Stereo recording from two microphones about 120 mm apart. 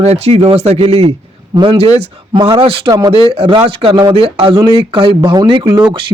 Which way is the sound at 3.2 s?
55° right (ahead or behind).